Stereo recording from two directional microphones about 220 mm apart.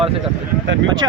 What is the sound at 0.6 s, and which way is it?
Speech, 55° right (ahead or behind).